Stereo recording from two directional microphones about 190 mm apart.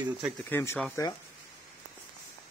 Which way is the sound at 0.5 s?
10° left (ahead or behind).